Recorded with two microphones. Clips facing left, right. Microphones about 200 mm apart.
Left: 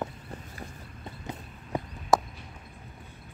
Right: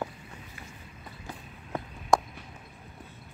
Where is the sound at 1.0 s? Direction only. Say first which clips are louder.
Left 4 dB; 20° left (ahead or behind).